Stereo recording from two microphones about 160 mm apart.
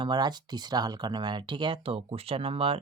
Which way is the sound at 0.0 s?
25° right (ahead or behind).